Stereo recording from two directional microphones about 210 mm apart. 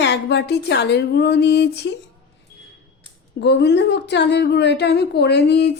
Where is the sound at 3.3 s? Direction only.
55° left (ahead or behind).